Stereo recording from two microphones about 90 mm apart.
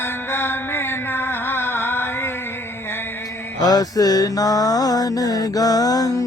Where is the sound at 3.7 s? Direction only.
45° left (ahead or behind).